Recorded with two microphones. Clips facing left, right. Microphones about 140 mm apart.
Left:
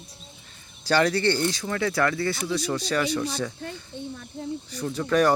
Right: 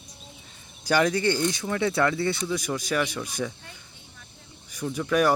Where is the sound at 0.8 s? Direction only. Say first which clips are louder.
Left 1 dB; 15° right (ahead or behind).